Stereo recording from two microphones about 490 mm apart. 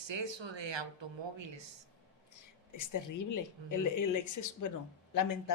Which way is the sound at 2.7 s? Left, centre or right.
Left.